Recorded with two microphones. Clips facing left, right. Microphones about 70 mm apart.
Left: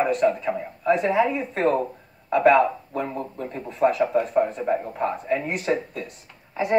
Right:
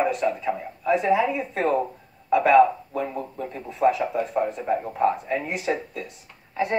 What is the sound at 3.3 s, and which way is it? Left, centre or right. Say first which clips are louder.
Speech: left 3 dB; left.